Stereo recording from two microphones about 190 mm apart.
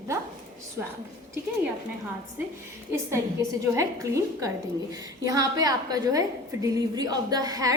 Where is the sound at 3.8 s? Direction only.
15° right (ahead or behind).